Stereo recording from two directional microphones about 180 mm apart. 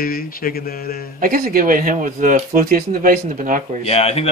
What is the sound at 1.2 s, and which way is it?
Speech, 50° right (ahead or behind).